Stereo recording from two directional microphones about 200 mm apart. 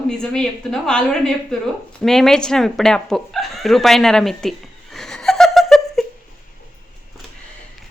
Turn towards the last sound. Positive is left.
turn(degrees=0)  # may be behind; listen again after turning